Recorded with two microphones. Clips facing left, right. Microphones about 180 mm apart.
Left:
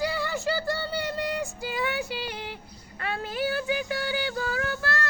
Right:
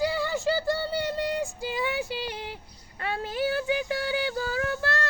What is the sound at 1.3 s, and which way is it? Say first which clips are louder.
Speech: right 1 dB; 30° right (ahead or behind).